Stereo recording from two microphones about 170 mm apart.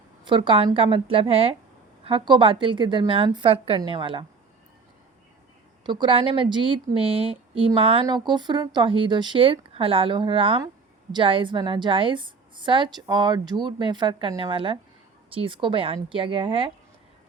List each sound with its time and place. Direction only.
0.3 s a woman's voice: 30° right (ahead or behind)
5.8 s a woman's voice: 30° right (ahead or behind)